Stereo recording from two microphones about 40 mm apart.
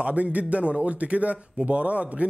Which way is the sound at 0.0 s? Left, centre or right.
Right.